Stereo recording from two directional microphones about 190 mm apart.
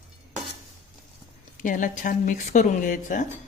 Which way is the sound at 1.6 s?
45° left (ahead or behind).